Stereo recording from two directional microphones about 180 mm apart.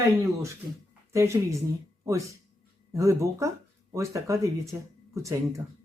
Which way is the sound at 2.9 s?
15° right (ahead or behind).